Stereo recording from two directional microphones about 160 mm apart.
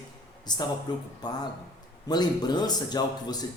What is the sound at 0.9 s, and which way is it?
Speech, 25° left (ahead or behind).